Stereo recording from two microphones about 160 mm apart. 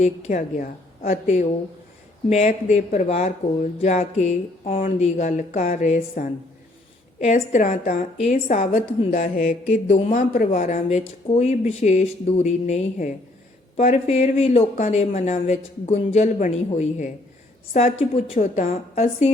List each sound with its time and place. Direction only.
0.0 s a woman's voice: 45° left (ahead or behind)